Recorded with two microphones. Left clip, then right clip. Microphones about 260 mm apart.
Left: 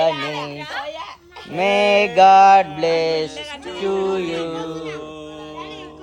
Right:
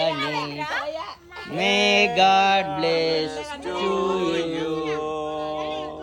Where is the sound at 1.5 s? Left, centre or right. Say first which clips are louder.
Left 4 dB; left.